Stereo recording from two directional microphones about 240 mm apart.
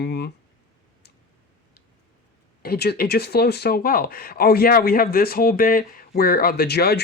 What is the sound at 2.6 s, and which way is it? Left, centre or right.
Speech, left.